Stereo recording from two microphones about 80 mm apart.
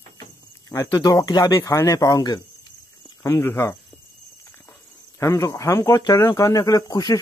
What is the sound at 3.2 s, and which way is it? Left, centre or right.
Speech, left.